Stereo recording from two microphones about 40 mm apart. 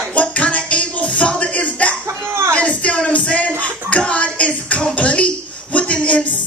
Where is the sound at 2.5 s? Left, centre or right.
Left.